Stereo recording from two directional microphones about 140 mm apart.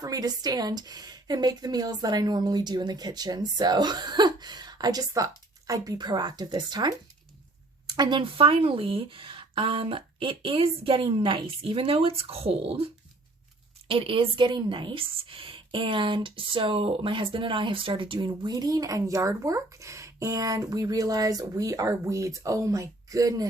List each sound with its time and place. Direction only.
0.0 s a woman's voice: 25° right (ahead or behind)